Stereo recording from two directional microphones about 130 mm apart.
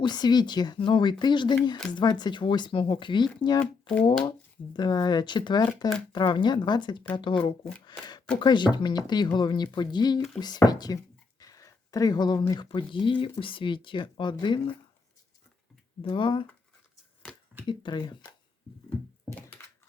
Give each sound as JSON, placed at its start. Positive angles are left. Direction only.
{"t": 0.0, "sound": "speech", "side_deg": 35}
{"t": 3.6, "sound": "speech", "side_deg": 10}
{"t": 4.3, "sound": "speech", "side_deg": 35}
{"t": 10.2, "sound": "speech", "side_deg": 5}
{"t": 10.4, "sound": "speech", "side_deg": 30}
{"t": 16.0, "sound": "speech", "side_deg": 40}
{"t": 17.7, "sound": "speech", "side_deg": 35}
{"t": 19.6, "sound": "computer keyboard", "side_deg": 15}